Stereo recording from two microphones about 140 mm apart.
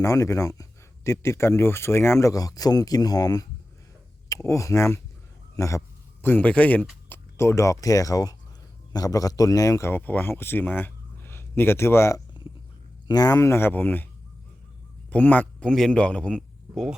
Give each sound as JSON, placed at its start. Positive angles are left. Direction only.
{"t": 0.0, "sound": "speech", "side_deg": 20}
{"t": 6.2, "sound": "speech", "side_deg": 10}
{"t": 15.1, "sound": "a man's voice", "side_deg": 10}